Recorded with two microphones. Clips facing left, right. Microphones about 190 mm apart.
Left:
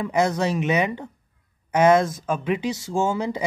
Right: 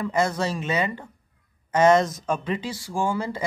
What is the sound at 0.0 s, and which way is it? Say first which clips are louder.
Speech: left 2 dB; 15° left (ahead or behind).